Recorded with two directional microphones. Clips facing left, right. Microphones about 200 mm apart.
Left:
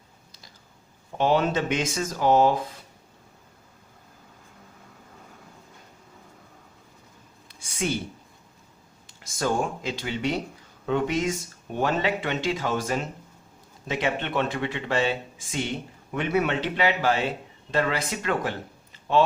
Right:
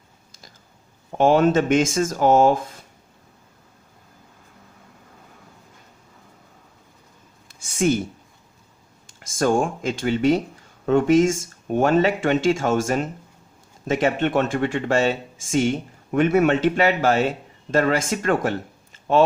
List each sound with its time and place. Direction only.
1.2 s speech: 45° right (ahead or behind)
7.4 s a sound: 45° right (ahead or behind)
9.0 s speech: 50° right (ahead or behind)